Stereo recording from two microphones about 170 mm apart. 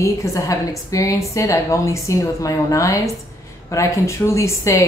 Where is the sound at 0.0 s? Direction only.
20° left (ahead or behind).